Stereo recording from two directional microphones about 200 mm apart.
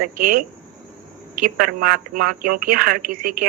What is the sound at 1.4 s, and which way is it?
Speech, 45° right (ahead or behind).